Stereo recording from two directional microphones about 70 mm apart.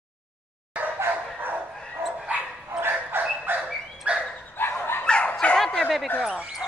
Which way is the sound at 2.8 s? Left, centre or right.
Right.